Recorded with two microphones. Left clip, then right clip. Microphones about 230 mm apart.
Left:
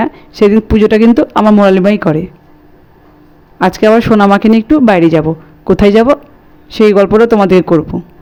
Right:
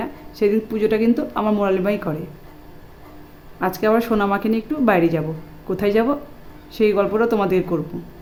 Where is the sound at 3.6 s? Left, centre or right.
Left.